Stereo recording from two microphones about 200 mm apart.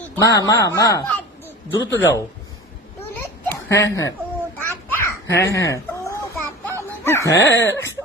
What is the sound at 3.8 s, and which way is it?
Speech, 15° left (ahead or behind).